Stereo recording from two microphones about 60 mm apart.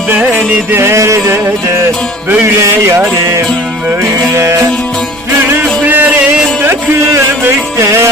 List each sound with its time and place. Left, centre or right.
0.1 s music: right
0.8 s music: right
2.6 s music: right
4.4 s music: right
5.8 s a sound: right
7.8 s music: right